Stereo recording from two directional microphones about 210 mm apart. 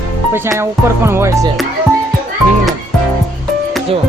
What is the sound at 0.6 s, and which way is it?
Speech, 10° right (ahead or behind).